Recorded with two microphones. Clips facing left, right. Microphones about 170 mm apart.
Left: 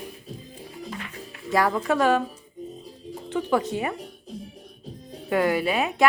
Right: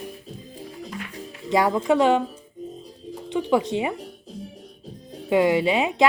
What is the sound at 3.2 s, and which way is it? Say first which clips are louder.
Speech: right 2 dB; 15° right (ahead or behind).